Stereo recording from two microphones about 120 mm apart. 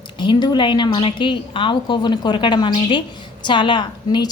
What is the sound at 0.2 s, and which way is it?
A woman's voice, 40° left (ahead or behind).